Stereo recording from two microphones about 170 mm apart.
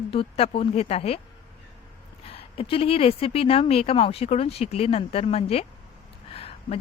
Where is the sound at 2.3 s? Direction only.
35° left (ahead or behind).